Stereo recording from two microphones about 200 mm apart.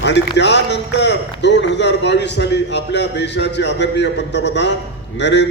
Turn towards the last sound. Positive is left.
turn(degrees=60)  # may be behind; listen again after turning